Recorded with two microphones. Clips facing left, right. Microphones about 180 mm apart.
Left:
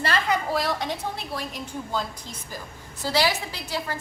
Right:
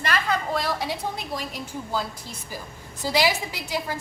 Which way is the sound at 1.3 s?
15° right (ahead or behind).